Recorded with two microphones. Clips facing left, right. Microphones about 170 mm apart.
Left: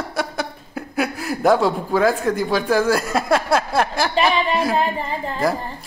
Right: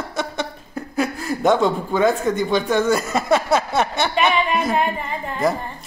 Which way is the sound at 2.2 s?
Centre (ahead or behind).